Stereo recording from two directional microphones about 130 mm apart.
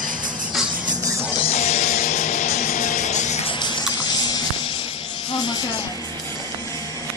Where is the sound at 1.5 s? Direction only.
55° left (ahead or behind).